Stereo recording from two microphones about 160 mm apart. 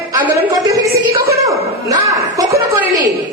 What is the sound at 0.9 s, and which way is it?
Speech, 70° right (ahead or behind).